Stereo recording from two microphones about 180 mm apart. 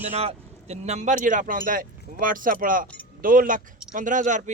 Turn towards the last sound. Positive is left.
turn(degrees=-45)  # may be behind; listen again after turning